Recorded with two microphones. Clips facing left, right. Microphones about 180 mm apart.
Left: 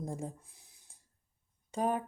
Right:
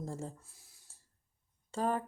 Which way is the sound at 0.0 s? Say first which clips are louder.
Left 2 dB; 15° left (ahead or behind).